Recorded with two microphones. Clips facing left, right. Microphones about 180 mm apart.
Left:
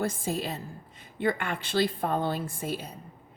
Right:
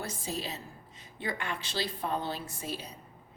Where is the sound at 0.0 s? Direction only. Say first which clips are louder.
Left 7 dB; 50° left (ahead or behind).